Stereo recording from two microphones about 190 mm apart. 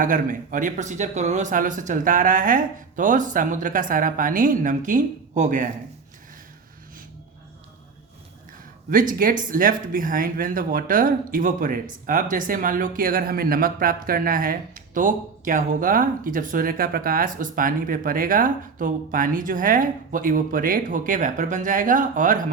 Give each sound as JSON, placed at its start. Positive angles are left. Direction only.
{"t": 0.0, "sound": "speech", "side_deg": -45}
{"t": 8.9, "sound": "speech", "side_deg": -45}